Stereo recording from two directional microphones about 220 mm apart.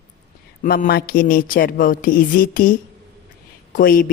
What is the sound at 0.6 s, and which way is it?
A man's voice, 40° left (ahead or behind).